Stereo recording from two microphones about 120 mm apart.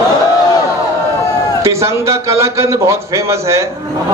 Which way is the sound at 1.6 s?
25° right (ahead or behind).